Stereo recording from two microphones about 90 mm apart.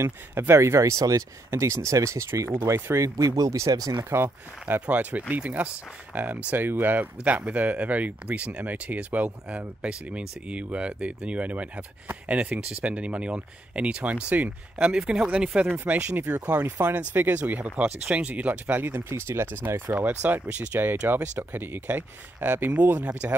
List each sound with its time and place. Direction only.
0.0 s speech: 25° right (ahead or behind); by 4.0 s 45° right (ahead or behind)
4.1 s speech: 25° right (ahead or behind)